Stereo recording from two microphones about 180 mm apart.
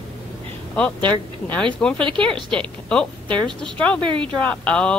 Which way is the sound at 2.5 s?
5° left (ahead or behind).